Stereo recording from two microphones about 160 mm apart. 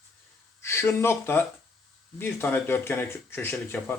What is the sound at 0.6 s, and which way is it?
Speech, 15° left (ahead or behind).